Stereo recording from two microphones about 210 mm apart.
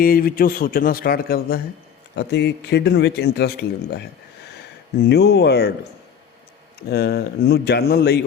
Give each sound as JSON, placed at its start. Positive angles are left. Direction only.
{"t": 0.0, "sound": "a man's voice", "side_deg": 45}
{"t": 5.0, "sound": "a man's voice", "side_deg": 50}
{"t": 6.7, "sound": "a man's voice", "side_deg": 50}